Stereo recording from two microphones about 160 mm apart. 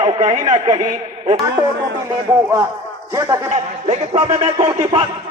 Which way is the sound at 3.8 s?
40° right (ahead or behind).